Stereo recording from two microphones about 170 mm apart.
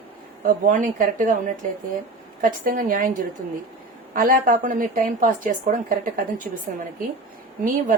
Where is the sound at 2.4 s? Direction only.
55° right (ahead or behind).